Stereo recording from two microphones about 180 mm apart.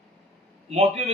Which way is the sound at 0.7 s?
35° right (ahead or behind).